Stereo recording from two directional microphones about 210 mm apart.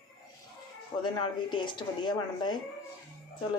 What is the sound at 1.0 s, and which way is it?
A woman's voice, 20° left (ahead or behind).